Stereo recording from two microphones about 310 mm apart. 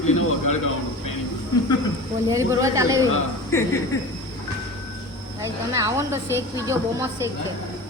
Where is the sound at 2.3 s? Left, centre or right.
Centre.